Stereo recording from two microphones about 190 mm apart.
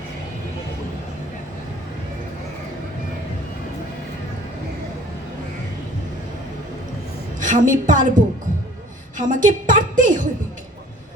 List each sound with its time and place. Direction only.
7.3 s a woman's voice: 40° right (ahead or behind)